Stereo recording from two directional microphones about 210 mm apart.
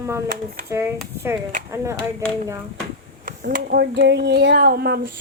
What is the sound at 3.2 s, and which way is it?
Speech, 40° right (ahead or behind).